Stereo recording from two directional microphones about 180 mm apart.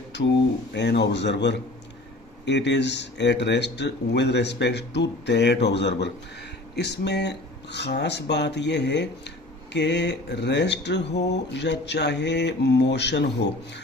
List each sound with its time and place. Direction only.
0.1 s speech: 75° left (ahead or behind)